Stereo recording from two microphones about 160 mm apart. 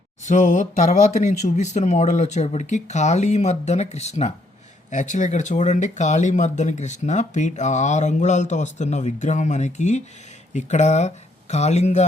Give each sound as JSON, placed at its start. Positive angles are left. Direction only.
{"t": 0.3, "sound": "speech", "side_deg": 50}